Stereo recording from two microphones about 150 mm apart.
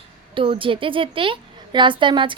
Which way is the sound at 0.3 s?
35° right (ahead or behind).